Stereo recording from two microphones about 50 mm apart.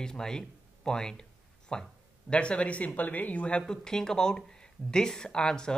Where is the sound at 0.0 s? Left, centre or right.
Centre.